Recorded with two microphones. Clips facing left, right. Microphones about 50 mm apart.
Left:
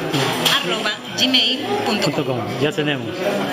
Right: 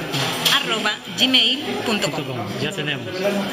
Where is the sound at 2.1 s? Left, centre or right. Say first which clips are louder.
Left 5 dB; left.